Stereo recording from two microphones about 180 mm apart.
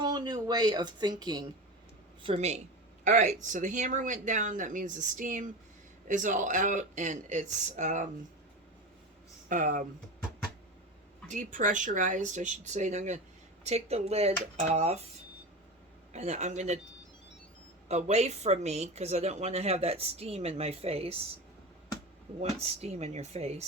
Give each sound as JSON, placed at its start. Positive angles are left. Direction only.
{"t": 0.0, "sound": "speech", "side_deg": -25}
{"t": 2.2, "sound": "a woman's voice", "side_deg": -35}
{"t": 9.5, "sound": "speech", "side_deg": -45}
{"t": 11.3, "sound": "a woman's voice", "side_deg": -45}
{"t": 16.1, "sound": "a woman's voice", "side_deg": -40}
{"t": 17.8, "sound": "a woman's voice", "side_deg": -35}
{"t": 22.4, "sound": "a woman's voice", "side_deg": -35}